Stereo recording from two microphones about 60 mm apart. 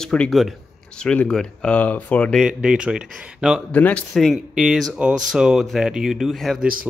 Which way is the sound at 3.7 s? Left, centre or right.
Left.